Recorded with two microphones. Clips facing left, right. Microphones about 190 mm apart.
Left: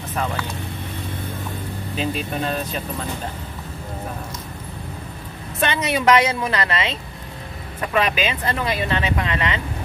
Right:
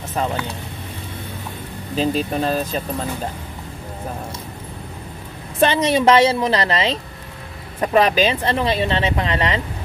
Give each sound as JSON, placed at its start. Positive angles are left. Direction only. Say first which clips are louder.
{"t": 0.1, "sound": "speech", "louder": "right 3 dB", "side_deg": -25}
{"t": 2.0, "sound": "speech", "louder": "right 5 dB", "side_deg": -35}
{"t": 5.6, "sound": "speech", "louder": "right 6 dB", "side_deg": -30}